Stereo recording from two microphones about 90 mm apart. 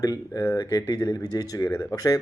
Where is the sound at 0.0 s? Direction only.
45° left (ahead or behind).